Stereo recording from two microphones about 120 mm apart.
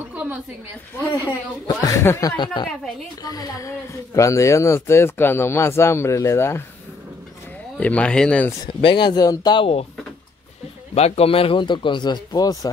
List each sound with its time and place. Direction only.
0.1 s a sound: 15° right (ahead or behind)
1.7 s speech: 30° left (ahead or behind)
2.3 s speech: 40° left (ahead or behind); by 6.6 s 20° left (ahead or behind)
7.7 s speech: 10° left (ahead or behind)
8.8 s speech: 40° left (ahead or behind)
11.0 s speech: 60° left (ahead or behind); by 12.7 s 30° left (ahead or behind)